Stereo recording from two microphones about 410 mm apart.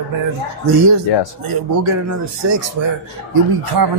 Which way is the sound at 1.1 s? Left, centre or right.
Left.